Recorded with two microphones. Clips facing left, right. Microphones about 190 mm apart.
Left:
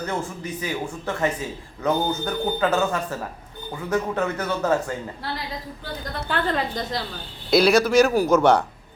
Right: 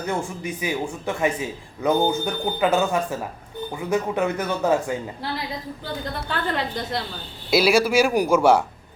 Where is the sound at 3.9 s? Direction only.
10° right (ahead or behind).